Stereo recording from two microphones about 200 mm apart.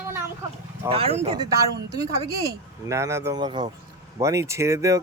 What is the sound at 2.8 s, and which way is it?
Speech, 15° right (ahead or behind).